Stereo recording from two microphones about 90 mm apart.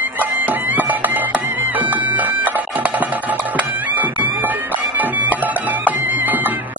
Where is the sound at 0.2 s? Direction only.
20° right (ahead or behind).